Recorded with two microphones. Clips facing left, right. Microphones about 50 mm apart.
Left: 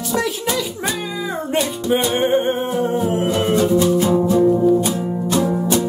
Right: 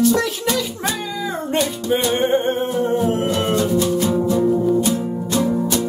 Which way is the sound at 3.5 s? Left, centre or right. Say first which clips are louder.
Left 5 dB; left.